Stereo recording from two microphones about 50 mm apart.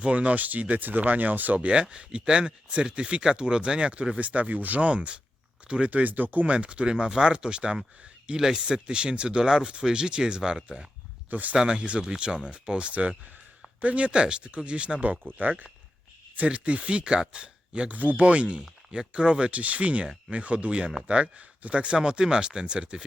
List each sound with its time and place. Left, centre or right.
0.0 s speech: right
11.3 s speech: right
11.5 s speech: centre
15.3 s speech: right
16.5 s speech: right
17.9 s speech: right